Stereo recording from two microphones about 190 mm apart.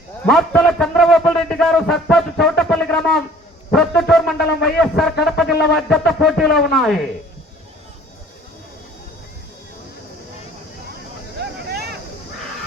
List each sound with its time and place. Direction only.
0.3 s a sound: 5° left (ahead or behind)
5.5 s a man's voice: centre (ahead or behind)
11.3 s vehicle: 55° right (ahead or behind)